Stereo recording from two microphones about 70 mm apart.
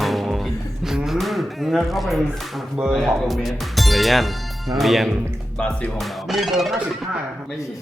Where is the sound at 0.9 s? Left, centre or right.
Centre.